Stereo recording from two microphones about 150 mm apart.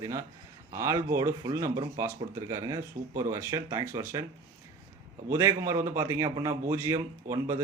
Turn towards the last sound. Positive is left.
turn(degrees=-20)  # may be behind; listen again after turning